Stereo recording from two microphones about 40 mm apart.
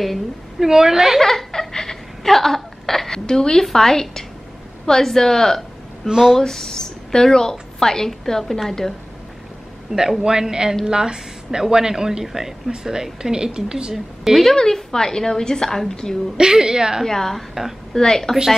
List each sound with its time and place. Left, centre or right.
0.6 s speech: centre
1.2 s laughter: centre
3.3 s a woman's voice: centre
6.0 s speech: centre
6.3 s a woman's voice: centre
9.9 s speech: centre
13.9 s speech: centre
14.4 s a woman's voice: centre
16.3 s speech: centre
17.0 s a woman's voice: centre